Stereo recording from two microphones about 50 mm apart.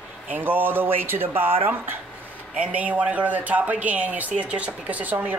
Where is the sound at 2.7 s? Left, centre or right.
Right.